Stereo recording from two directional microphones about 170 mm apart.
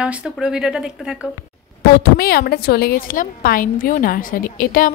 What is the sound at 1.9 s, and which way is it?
A woman's voice, 60° left (ahead or behind).